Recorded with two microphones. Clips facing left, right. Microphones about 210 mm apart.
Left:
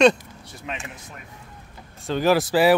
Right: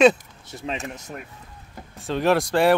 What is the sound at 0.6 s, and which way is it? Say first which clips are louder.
Speech: right 4 dB; 30° right (ahead or behind).